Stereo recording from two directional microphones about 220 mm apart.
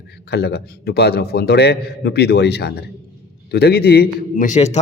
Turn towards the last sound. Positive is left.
turn(degrees=30)  # may be behind; listen again after turning